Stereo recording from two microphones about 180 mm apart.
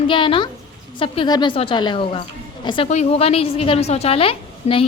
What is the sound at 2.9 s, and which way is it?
A woman's voice, 35° left (ahead or behind).